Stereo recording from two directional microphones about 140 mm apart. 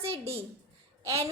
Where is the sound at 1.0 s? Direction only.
20° right (ahead or behind).